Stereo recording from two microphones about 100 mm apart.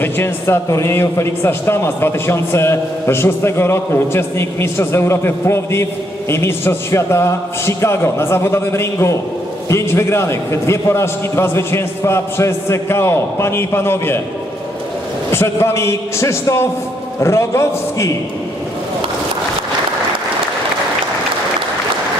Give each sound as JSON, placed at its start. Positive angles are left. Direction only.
{"t": 0.0, "sound": "a man's voice", "side_deg": 25}
{"t": 15.3, "sound": "a man's voice", "side_deg": 25}